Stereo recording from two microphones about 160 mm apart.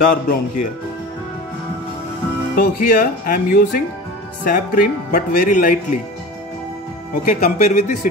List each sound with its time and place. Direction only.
0.0 s speech: 60° left (ahead or behind)
2.5 s speech: 65° left (ahead or behind)
7.2 s speech: 50° left (ahead or behind)